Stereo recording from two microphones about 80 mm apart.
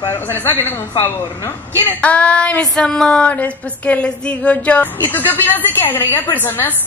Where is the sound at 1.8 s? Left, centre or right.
Centre.